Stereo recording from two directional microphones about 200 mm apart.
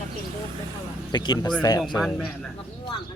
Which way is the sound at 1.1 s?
20° left (ahead or behind).